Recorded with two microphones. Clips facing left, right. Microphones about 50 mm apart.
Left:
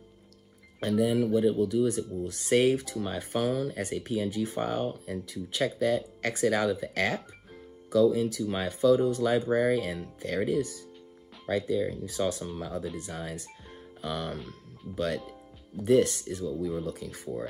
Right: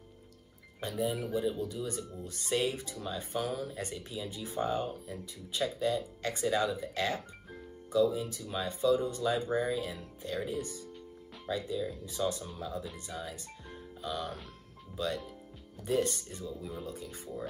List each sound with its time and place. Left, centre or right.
0.7 s speech: left
1.2 s speech: left
4.7 s speech: left
5.6 s speech: left
9.5 s speech: left
11.7 s speech: left